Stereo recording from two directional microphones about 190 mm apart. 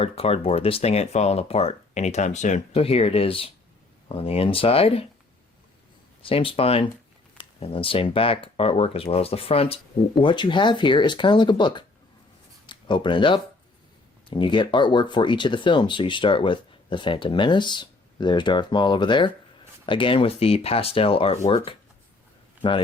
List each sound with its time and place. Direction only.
0.0 s speech: 30° left (ahead or behind)
6.2 s speech: 30° left (ahead or behind)